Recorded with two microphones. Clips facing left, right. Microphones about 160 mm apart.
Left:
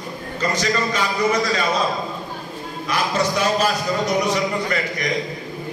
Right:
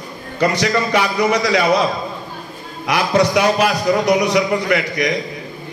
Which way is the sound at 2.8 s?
70° right (ahead or behind).